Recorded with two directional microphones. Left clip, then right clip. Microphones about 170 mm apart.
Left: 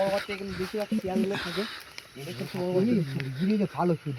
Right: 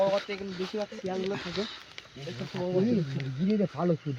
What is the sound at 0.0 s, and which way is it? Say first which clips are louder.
Speech: right 1 dB; 10° right (ahead or behind).